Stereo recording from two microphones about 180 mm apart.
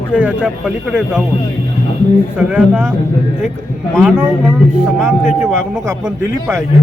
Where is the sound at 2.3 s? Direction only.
5° right (ahead or behind).